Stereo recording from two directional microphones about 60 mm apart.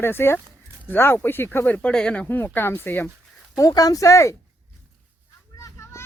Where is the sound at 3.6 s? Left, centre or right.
Left.